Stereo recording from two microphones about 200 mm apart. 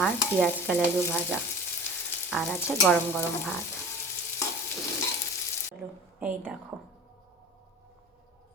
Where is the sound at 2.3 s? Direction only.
Centre (ahead or behind).